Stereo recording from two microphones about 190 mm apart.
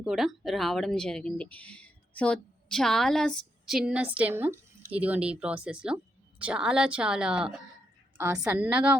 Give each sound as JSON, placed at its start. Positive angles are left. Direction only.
{"t": 0.0, "sound": "speech", "side_deg": 0}
{"t": 8.2, "sound": "speech", "side_deg": -15}